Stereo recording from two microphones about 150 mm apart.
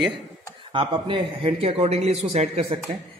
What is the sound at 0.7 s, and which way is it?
A man's voice, 35° right (ahead or behind).